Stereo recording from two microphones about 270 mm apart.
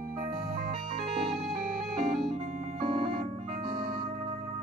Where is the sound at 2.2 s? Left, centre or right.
Right.